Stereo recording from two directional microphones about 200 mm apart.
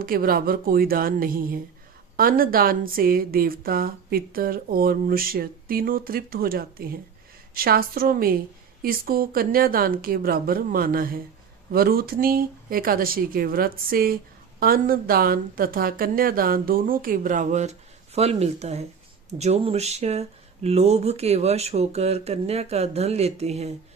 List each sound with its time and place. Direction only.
0.0 s speech: 45° right (ahead or behind)